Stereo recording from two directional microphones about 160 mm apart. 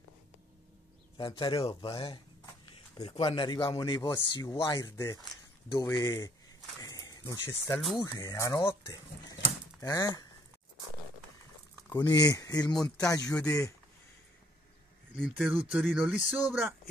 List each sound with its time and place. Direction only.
1.1 s speech: 30° left (ahead or behind)
3.2 s speech: 30° left (ahead or behind)
6.8 s a sound: 25° left (ahead or behind)
8.0 s speech: 20° left (ahead or behind)
11.9 s speech: 20° left (ahead or behind)
15.1 s speech: 5° left (ahead or behind)
15.4 s speech: 10° right (ahead or behind)